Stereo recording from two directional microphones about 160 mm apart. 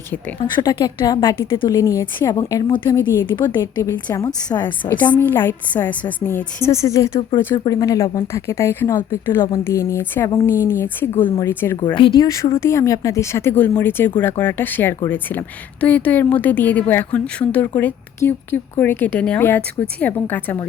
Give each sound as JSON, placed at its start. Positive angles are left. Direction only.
{"t": 0.3, "sound": "a woman's voice", "side_deg": 25}
{"t": 2.9, "sound": "a woman's voice", "side_deg": 15}
{"t": 4.6, "sound": "speech", "side_deg": 10}
{"t": 11.9, "sound": "a woman's voice", "side_deg": 30}